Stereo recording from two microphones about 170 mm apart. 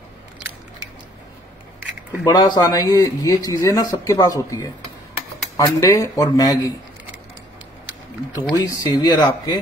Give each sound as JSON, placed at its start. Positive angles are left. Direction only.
{"t": 2.2, "sound": "speech", "side_deg": 25}
{"t": 8.4, "sound": "speech", "side_deg": 20}